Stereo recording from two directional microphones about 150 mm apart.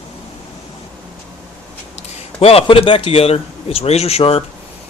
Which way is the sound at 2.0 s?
40° left (ahead or behind).